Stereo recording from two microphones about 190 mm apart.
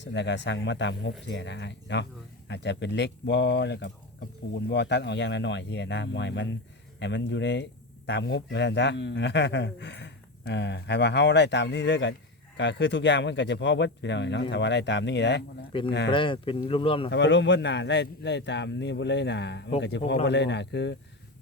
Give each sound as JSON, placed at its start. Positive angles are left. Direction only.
{"t": 0.0, "sound": "a man's voice", "side_deg": 65}
{"t": 15.7, "sound": "speech", "side_deg": 25}
{"t": 17.1, "sound": "a man's voice", "side_deg": 70}